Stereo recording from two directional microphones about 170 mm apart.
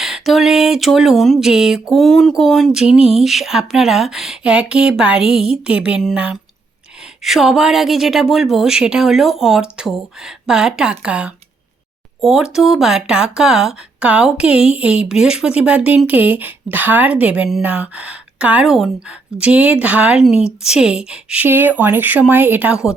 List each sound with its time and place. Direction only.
0.0 s speech: centre (ahead or behind)